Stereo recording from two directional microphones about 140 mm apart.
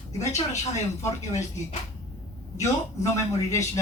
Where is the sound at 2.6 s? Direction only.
20° left (ahead or behind).